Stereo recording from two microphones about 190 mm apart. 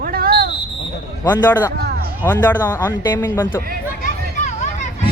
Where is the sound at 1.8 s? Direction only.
60° right (ahead or behind).